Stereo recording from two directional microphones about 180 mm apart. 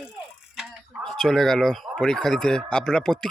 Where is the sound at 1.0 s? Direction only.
5° left (ahead or behind).